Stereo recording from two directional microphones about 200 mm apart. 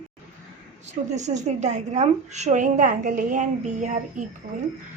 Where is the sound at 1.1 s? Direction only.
35° right (ahead or behind).